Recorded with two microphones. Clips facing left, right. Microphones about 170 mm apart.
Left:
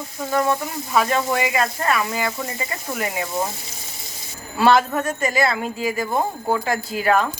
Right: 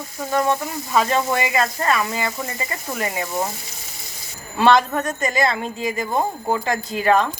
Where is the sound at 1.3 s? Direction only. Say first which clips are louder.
Even; 10° left (ahead or behind).